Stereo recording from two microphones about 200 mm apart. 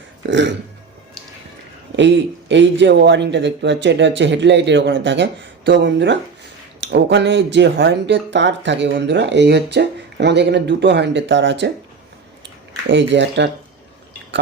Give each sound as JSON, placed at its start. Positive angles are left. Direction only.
{"t": 0.2, "sound": "a sound", "side_deg": -65}
{"t": 2.0, "sound": "speech", "side_deg": -65}
{"t": 12.9, "sound": "speech", "side_deg": -60}